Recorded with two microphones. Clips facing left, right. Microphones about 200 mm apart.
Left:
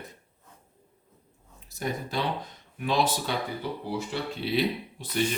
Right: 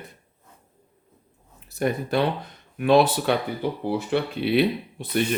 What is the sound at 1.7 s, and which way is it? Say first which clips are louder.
Speech: right 8 dB; 60° right (ahead or behind).